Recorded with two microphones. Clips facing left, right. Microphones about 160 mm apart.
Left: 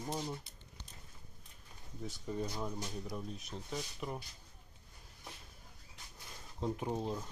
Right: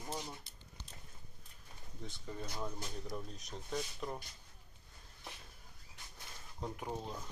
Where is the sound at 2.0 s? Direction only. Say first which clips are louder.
Left 6 dB; 10° left (ahead or behind).